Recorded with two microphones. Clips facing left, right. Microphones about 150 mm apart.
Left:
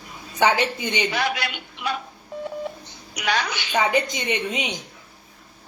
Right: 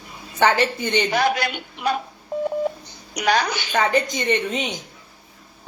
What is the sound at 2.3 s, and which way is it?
Telephone dialing, 45° right (ahead or behind).